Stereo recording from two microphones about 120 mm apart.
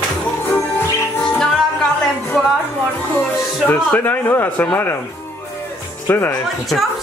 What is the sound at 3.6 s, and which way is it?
A man's voice, 15° left (ahead or behind).